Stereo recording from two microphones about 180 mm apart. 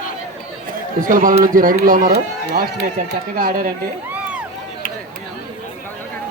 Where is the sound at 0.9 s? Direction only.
50° right (ahead or behind).